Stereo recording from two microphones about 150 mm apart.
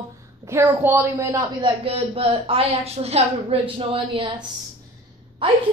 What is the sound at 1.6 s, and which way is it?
A woman's voice, 40° right (ahead or behind).